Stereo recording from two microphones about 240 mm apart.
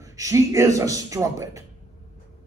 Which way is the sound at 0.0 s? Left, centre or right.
Centre.